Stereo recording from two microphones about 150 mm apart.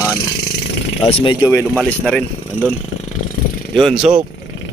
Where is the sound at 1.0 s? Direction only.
40° left (ahead or behind).